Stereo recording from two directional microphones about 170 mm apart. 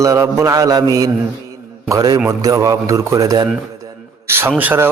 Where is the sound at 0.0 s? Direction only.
15° right (ahead or behind).